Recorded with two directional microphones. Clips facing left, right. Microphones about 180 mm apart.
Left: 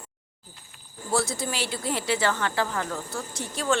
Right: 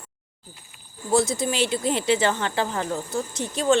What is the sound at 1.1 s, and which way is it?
Speech, 20° right (ahead or behind).